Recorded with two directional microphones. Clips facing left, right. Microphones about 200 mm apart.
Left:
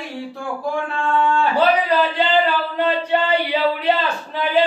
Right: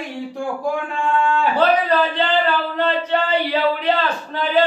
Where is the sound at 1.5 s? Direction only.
10° left (ahead or behind).